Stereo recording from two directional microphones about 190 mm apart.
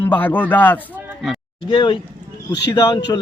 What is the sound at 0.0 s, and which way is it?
Speech, 10° left (ahead or behind).